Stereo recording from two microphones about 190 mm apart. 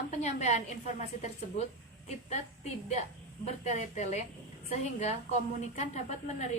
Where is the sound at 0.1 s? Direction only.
35° left (ahead or behind).